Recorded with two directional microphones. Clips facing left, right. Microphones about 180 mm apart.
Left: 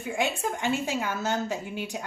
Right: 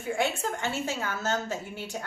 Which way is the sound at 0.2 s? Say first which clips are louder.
Left 2 dB; 15° left (ahead or behind).